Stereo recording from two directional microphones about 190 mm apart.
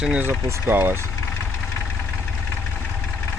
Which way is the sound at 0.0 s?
5° right (ahead or behind).